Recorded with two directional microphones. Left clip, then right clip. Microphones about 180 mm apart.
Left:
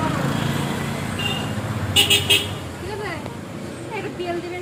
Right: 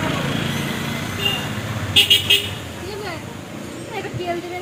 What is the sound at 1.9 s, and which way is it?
Vehicle, 45° left (ahead or behind).